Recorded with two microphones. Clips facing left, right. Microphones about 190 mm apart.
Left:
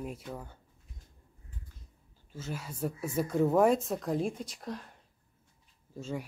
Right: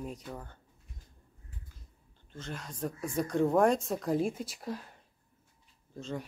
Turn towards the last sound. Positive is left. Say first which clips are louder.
# left 1 dB
turn(degrees=10)  # may be behind; listen again after turning